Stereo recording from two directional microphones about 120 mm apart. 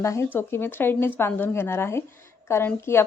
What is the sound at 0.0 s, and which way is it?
A woman's voice, 25° left (ahead or behind).